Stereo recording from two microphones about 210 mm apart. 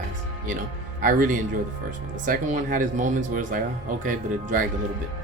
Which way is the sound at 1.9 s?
40° right (ahead or behind).